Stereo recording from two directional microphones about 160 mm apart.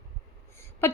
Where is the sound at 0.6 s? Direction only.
15° left (ahead or behind).